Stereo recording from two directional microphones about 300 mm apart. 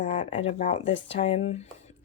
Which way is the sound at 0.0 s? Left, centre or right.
Left.